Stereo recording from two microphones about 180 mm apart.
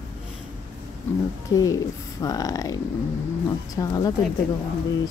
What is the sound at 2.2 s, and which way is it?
Speech, 20° left (ahead or behind).